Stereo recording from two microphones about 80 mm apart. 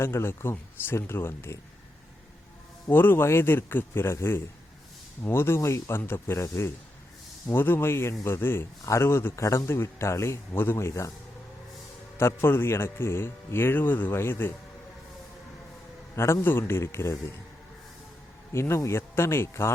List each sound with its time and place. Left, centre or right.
0.0 s speech: left
2.9 s a man's voice: left
12.1 s speech: left
16.1 s a man's voice: left
18.5 s a man's voice: left